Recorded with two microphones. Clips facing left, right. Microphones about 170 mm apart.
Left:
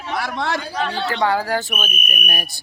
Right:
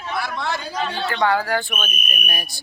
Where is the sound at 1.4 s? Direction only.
40° left (ahead or behind).